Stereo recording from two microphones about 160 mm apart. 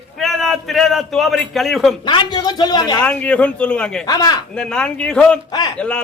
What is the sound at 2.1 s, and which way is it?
Speech, 30° left (ahead or behind).